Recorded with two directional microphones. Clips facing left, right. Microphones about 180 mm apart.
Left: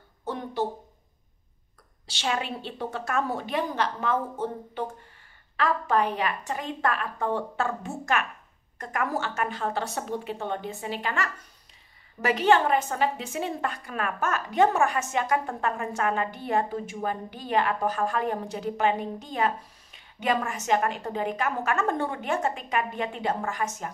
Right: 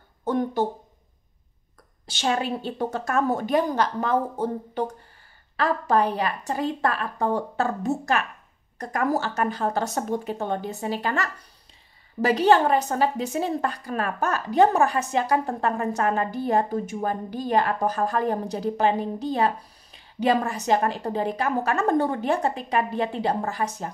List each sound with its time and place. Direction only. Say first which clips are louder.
0.2 s speech: right 6 dB; 45° right (ahead or behind)
2.0 s a woman's voice: right 5 dB; 45° right (ahead or behind)